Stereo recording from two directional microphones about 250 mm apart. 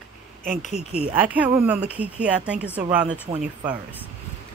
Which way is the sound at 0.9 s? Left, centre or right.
Centre.